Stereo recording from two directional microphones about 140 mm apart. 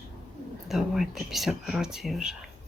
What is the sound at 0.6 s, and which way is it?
Speech, centre (ahead or behind).